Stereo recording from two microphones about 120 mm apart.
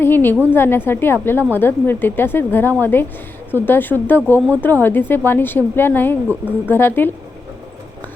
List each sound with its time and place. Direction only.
0.0 s a woman's voice: 20° left (ahead or behind)